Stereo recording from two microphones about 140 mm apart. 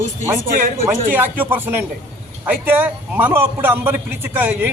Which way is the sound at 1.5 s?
15° right (ahead or behind).